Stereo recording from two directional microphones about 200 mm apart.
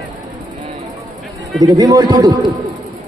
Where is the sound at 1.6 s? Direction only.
20° right (ahead or behind).